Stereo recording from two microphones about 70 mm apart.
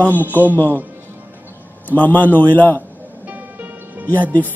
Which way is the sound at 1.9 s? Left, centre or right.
Left.